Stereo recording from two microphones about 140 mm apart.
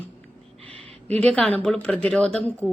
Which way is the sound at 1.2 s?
10° left (ahead or behind).